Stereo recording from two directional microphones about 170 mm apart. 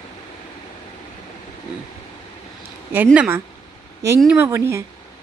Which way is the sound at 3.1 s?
15° right (ahead or behind).